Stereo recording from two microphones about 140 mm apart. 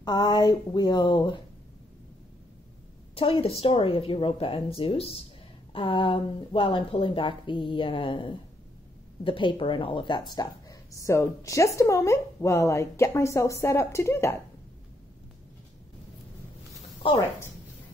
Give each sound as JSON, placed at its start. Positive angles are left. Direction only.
{"t": 0.0, "sound": "speech", "side_deg": 30}
{"t": 3.2, "sound": "speech", "side_deg": 40}